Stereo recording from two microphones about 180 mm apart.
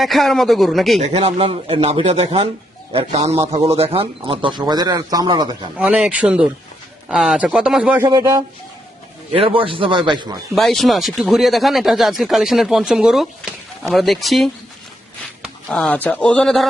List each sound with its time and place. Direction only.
0.0 s speech: centre (ahead or behind)
0.9 s a man's voice: 35° right (ahead or behind)
5.7 s speech: 5° right (ahead or behind)
8.0 s a man's voice: 20° right (ahead or behind)
9.3 s a man's voice: 30° right (ahead or behind)
10.5 s speech: centre (ahead or behind)